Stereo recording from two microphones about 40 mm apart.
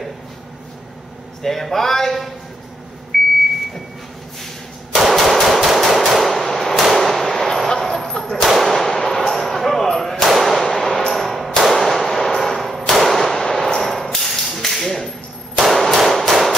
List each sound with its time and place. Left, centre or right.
1.4 s a man's voice: centre
3.1 s a sound: centre
4.9 s machine gun: centre
8.5 s gunshot: centre
11.1 s a sound: centre
15.5 s clang: centre